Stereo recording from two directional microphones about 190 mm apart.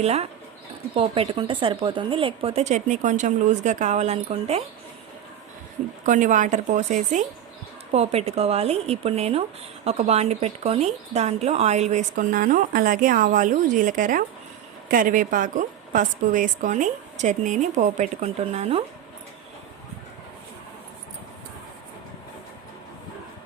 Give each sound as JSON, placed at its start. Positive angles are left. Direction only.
{"t": 0.0, "sound": "a woman's voice", "side_deg": -35}
{"t": 6.1, "sound": "a woman's voice", "side_deg": -40}